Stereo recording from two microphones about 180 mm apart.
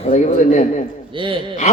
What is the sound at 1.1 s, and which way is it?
Speech, 30° right (ahead or behind).